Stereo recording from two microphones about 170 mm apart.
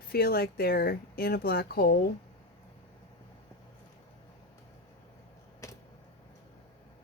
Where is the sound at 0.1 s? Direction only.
65° left (ahead or behind).